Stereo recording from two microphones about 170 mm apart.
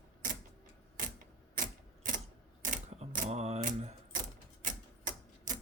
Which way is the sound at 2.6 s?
45° right (ahead or behind).